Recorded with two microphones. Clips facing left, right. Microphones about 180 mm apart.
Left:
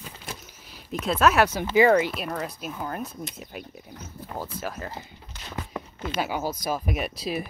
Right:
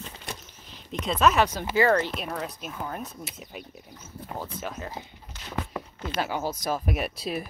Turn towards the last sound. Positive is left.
turn(degrees=0)  # may be behind; listen again after turning